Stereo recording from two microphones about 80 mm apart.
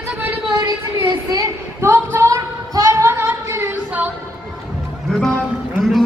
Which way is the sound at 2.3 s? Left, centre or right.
Right.